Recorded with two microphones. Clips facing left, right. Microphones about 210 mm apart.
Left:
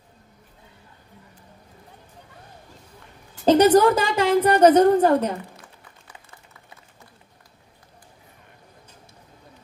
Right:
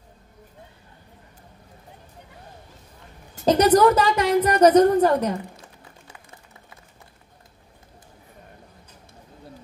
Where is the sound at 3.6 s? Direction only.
30° left (ahead or behind).